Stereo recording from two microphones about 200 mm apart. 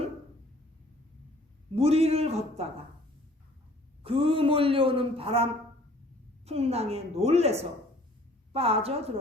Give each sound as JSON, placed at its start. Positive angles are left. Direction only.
{"t": 1.7, "sound": "a woman's voice", "side_deg": -30}
{"t": 4.0, "sound": "a man's voice", "side_deg": -30}